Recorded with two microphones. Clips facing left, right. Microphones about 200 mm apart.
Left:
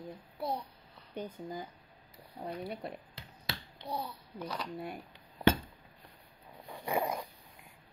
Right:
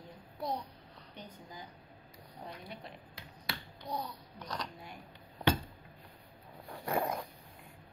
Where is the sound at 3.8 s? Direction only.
5° left (ahead or behind).